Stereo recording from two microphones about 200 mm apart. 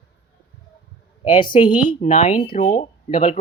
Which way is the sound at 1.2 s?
25° left (ahead or behind).